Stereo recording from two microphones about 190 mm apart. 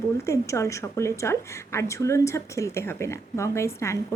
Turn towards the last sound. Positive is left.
turn(degrees=15)  # may be behind; listen again after turning